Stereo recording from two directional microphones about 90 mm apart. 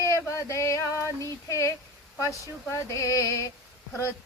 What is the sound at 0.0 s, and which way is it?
Female singing, 35° left (ahead or behind).